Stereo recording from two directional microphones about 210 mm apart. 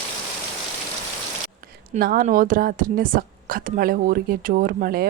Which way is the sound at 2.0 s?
45° right (ahead or behind).